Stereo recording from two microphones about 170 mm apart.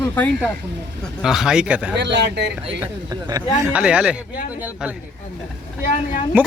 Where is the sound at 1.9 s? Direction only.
90° right.